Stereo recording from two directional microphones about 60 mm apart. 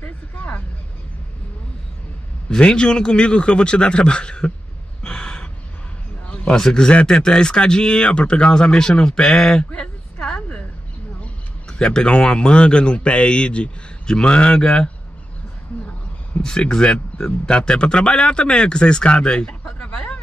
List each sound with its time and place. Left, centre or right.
0.0 s vehicle: left
2.5 s speech: centre
5.0 s gasp: centre
6.2 s a sound: centre
6.5 s speech: centre
9.7 s a sound: left
11.1 s a man's voice: centre
16.3 s speech: centre
19.6 s a sound: left